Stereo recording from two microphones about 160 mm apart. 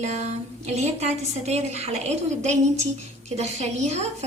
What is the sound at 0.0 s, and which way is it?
A woman's voice, 45° right (ahead or behind).